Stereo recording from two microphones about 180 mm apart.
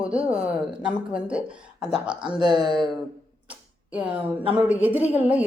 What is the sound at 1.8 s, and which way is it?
Speech, 5° right (ahead or behind).